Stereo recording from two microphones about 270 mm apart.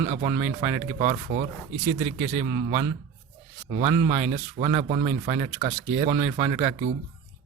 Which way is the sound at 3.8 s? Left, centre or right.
Right.